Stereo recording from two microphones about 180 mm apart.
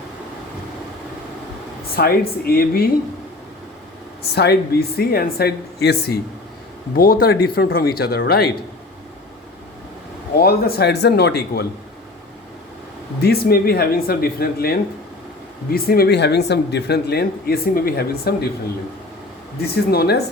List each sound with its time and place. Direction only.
2.0 s speech: 60° left (ahead or behind)
4.2 s speech: 65° left (ahead or behind)
10.3 s speech: 60° left (ahead or behind)
13.2 s speech: 60° left (ahead or behind)
19.7 s speech: 60° left (ahead or behind)